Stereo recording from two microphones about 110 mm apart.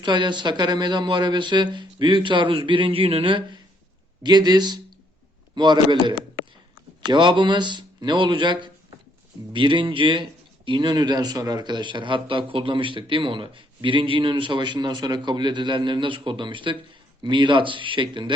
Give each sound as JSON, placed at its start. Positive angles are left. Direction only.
{"t": 0.0, "sound": "speech", "side_deg": -45}